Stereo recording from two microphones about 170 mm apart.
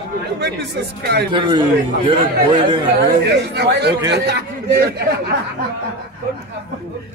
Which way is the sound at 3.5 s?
70° right (ahead or behind).